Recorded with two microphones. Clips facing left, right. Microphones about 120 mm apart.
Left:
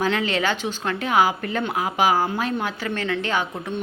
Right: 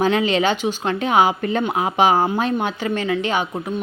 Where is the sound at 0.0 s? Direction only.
20° right (ahead or behind).